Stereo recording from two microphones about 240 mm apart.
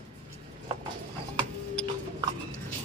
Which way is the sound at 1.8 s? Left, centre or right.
Centre.